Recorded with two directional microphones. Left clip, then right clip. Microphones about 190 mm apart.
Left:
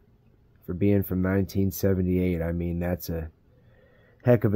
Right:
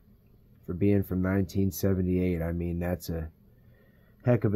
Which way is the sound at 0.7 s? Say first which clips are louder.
Left 2 dB; 10° left (ahead or behind).